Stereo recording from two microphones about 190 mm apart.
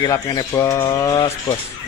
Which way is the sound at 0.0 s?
20° left (ahead or behind).